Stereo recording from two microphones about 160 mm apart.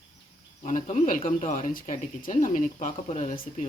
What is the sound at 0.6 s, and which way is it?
Speech, 45° left (ahead or behind).